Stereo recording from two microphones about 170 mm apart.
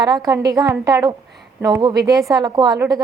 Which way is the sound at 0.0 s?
20° right (ahead or behind).